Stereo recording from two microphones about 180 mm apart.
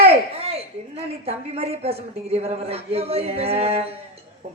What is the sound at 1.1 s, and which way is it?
Speech, 35° right (ahead or behind).